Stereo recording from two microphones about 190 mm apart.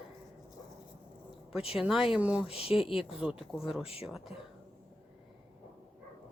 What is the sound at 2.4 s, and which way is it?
Speech, 30° left (ahead or behind).